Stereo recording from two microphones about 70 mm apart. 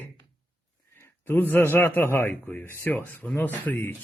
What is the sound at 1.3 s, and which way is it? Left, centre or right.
A man's voice, left.